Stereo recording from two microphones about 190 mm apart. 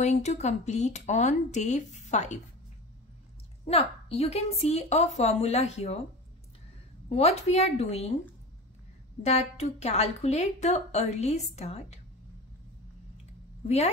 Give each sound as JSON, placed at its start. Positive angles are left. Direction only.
{"t": 0.0, "sound": "a woman's voice", "side_deg": 35}
{"t": 3.6, "sound": "a woman's voice", "side_deg": 35}
{"t": 7.1, "sound": "a woman's voice", "side_deg": 35}
{"t": 9.2, "sound": "a woman's voice", "side_deg": 35}